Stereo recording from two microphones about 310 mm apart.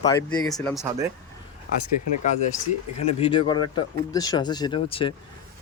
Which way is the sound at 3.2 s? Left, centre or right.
Centre.